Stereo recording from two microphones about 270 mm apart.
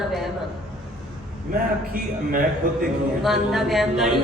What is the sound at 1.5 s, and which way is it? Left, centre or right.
A man's voice, right.